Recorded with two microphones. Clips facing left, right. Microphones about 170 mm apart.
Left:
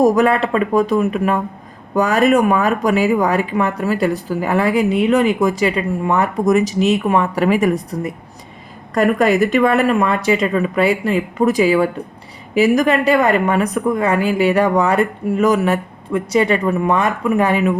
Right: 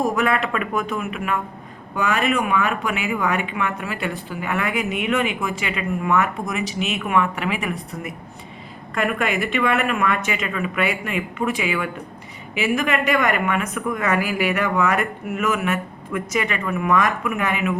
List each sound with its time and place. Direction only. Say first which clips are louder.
0.0 s speech: left 8 dB; 40° left (ahead or behind)